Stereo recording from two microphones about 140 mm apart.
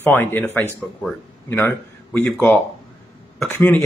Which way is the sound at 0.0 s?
15° left (ahead or behind).